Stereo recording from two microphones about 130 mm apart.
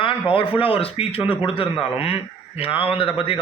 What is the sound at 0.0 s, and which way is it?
A man's voice, 45° left (ahead or behind).